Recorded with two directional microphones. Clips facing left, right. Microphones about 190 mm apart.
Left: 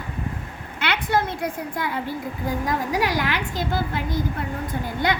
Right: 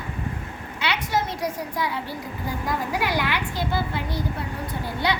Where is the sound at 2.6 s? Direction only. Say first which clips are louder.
Left 1 dB; 45° left (ahead or behind).